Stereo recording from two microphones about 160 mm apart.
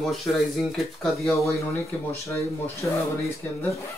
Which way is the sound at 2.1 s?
20° left (ahead or behind).